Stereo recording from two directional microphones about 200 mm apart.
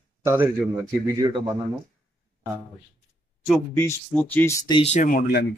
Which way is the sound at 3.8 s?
10° left (ahead or behind).